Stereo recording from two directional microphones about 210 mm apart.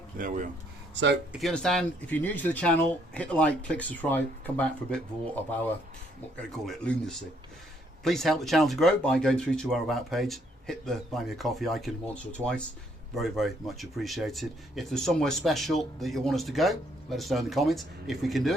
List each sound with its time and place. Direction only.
0.2 s speech: 40° right (ahead or behind)
1.3 s speech: centre (ahead or behind)